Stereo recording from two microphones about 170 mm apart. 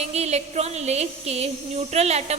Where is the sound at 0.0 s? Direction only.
40° right (ahead or behind).